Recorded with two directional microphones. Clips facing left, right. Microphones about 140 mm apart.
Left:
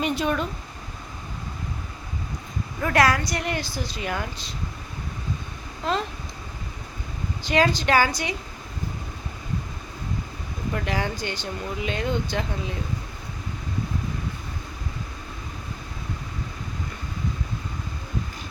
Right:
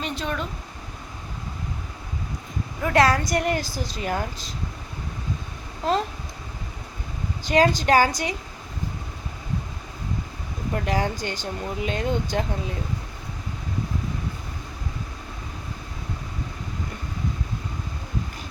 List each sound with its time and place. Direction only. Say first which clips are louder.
0.0 s speech: left 5 dB; 10° left (ahead or behind)
2.8 s a woman's voice: right 1 dB; 25° right (ahead or behind)
3.2 s speech: right 4 dB; 45° right (ahead or behind)
5.8 s speech: right 3 dB; 40° right (ahead or behind)
7.4 s a woman's voice: right 2 dB; 45° right (ahead or behind)
10.8 s speech: right 4 dB; 40° right (ahead or behind)